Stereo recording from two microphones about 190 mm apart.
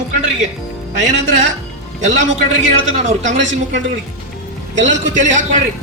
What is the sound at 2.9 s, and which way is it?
Speech, 40° right (ahead or behind).